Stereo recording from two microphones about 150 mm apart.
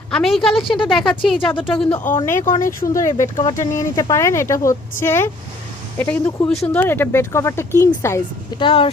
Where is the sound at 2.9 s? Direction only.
20° left (ahead or behind).